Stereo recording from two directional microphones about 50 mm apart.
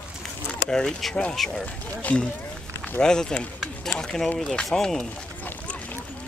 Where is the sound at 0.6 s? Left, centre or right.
Centre.